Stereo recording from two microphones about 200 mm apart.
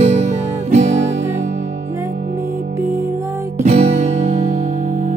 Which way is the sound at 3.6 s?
35° right (ahead or behind).